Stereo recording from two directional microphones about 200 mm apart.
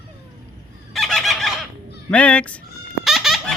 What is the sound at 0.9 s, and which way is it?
Fowl, centre (ahead or behind).